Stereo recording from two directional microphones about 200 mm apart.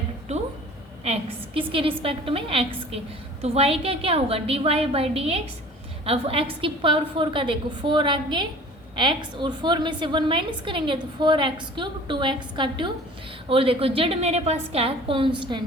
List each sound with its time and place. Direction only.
1.0 s a woman's voice: 30° right (ahead or behind)